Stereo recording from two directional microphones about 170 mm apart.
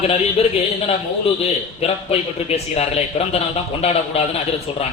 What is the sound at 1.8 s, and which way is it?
A man's voice, 40° left (ahead or behind).